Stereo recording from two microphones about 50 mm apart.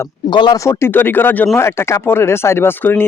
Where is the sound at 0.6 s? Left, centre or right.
Left.